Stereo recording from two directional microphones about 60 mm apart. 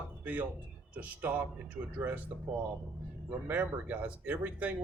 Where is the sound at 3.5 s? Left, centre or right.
Right.